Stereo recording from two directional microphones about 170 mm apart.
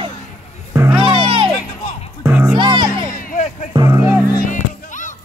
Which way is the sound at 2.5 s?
25° right (ahead or behind).